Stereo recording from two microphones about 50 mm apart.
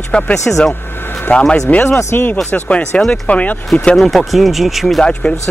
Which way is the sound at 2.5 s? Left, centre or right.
Left.